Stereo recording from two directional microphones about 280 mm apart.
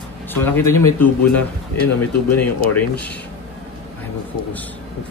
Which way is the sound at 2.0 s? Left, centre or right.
Centre.